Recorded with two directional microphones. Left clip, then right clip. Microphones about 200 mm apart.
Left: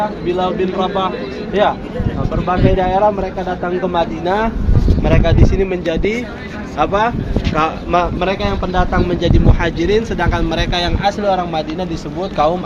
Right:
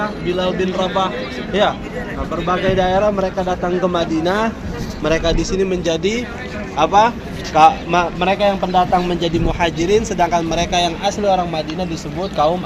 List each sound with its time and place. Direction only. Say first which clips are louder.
0.3 s a man's voice: left 1 dB; 55° right (ahead or behind)
2.5 s speech: left 1 dB; 50° right (ahead or behind); by 12.5 s 15° right (ahead or behind)